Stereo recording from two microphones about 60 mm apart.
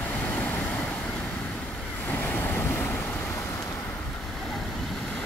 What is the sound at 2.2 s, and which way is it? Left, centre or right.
Waves, left.